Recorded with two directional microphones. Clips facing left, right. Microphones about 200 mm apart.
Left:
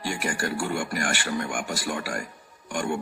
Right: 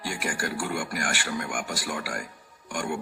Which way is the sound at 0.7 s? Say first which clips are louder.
Left 2 dB; 25° left (ahead or behind).